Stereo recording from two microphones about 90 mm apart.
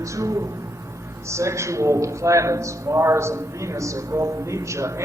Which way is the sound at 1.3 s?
30° right (ahead or behind).